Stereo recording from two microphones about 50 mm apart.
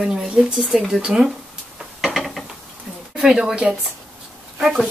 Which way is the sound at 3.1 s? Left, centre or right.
Centre.